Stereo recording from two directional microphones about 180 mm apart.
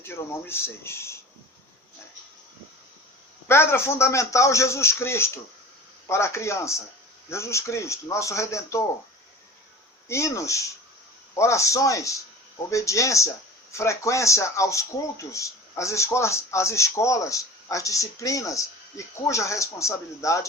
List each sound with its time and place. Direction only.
0.0 s speech: 15° left (ahead or behind)
3.5 s speech: 15° left (ahead or behind)
10.1 s speech: 15° left (ahead or behind)